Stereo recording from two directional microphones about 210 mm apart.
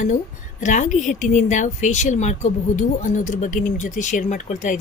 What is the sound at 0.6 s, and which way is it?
Speech, 35° left (ahead or behind).